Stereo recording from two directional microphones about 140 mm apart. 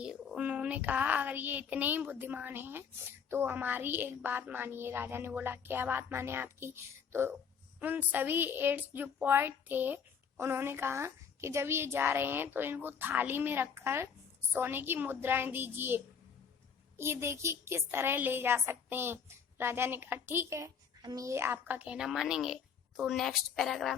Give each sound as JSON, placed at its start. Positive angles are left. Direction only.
{"t": 0.0, "sound": "a child's voice", "side_deg": -5}
{"t": 17.0, "sound": "a woman's voice", "side_deg": -20}